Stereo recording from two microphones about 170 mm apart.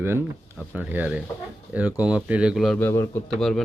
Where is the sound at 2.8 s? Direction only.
15° left (ahead or behind).